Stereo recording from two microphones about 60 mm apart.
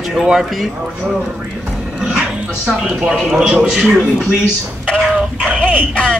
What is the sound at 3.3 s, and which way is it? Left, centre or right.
Speech, centre.